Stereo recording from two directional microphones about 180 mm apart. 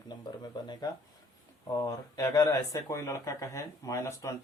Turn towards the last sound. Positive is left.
turn(degrees=20)  # may be behind; listen again after turning